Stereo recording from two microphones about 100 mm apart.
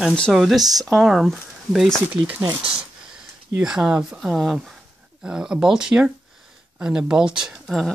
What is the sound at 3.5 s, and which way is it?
Speech, 5° right (ahead or behind).